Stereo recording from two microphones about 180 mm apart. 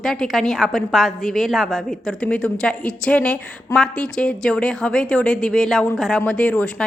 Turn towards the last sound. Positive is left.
turn(degrees=5)  # may be behind; listen again after turning